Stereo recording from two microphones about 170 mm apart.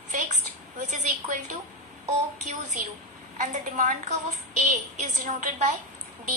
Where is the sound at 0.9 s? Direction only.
50° right (ahead or behind).